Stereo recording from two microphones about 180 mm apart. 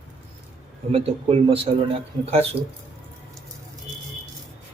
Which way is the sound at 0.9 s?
35° right (ahead or behind).